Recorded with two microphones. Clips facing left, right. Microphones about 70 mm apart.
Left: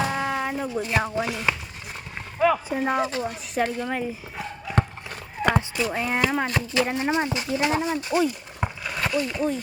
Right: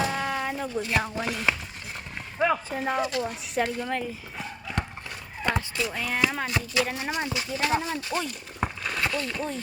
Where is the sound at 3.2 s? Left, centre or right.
Centre.